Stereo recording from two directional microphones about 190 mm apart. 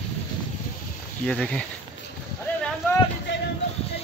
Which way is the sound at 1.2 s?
5° left (ahead or behind).